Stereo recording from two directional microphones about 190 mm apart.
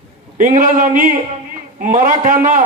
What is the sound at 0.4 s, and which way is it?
A man's voice, 45° right (ahead or behind).